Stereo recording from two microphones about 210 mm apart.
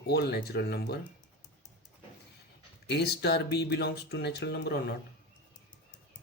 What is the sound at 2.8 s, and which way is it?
Speech, 50° left (ahead or behind).